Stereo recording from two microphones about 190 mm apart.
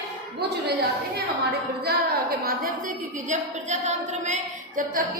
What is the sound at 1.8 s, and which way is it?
Speech, 50° right (ahead or behind).